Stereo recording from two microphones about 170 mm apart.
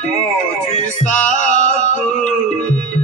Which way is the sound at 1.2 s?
45° left (ahead or behind).